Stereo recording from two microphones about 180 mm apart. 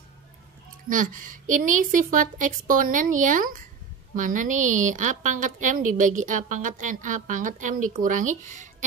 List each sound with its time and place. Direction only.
0.8 s a woman's voice: 50° right (ahead or behind)